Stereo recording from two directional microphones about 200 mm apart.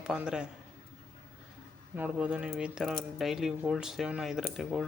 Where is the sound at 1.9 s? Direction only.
5° right (ahead or behind).